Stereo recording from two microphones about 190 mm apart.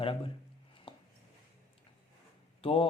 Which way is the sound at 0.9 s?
25° left (ahead or behind).